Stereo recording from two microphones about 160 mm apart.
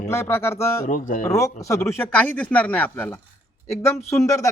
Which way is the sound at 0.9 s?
55° left (ahead or behind).